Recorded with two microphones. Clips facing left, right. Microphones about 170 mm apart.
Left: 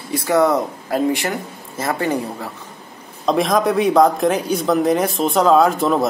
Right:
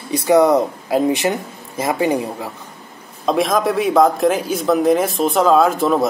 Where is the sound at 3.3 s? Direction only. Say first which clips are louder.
Even; centre (ahead or behind).